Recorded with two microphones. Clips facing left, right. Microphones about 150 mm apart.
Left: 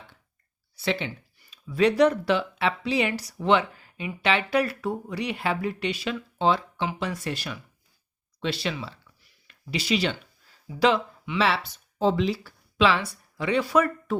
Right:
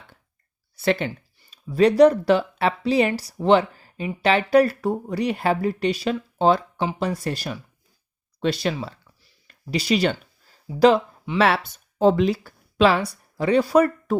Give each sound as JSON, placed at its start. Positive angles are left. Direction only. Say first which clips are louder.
{"t": 0.8, "sound": "speech", "louder": "right 6 dB", "side_deg": -50}
{"t": 1.4, "sound": "speech", "louder": "right 4 dB", "side_deg": -35}